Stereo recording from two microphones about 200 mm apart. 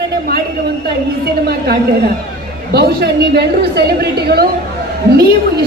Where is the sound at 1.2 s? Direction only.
55° right (ahead or behind).